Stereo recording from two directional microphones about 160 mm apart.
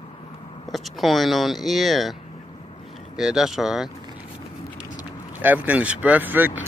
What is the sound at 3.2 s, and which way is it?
Speech, 5° right (ahead or behind).